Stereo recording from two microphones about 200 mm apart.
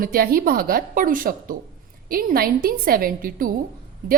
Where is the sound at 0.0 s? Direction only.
45° right (ahead or behind).